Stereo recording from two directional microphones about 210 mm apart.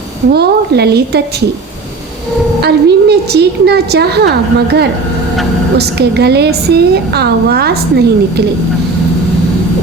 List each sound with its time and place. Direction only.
0.3 s a woman's voice: 50° right (ahead or behind)
2.6 s a woman's voice: 50° right (ahead or behind)
5.7 s a woman's voice: 50° right (ahead or behind)